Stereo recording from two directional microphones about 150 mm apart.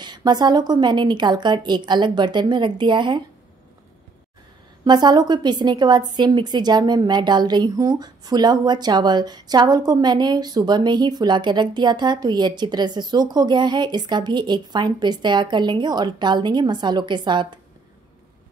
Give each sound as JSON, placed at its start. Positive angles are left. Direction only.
{"t": 0.0, "sound": "a woman's voice", "side_deg": -30}
{"t": 4.8, "sound": "a woman's voice", "side_deg": -30}